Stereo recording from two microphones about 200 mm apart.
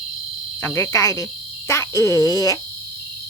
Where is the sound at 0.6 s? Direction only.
15° left (ahead or behind).